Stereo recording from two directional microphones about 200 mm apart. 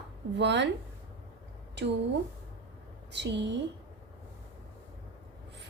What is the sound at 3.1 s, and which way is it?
Speech, 60° right (ahead or behind).